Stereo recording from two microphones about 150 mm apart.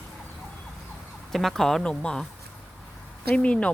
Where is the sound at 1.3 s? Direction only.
Centre (ahead or behind).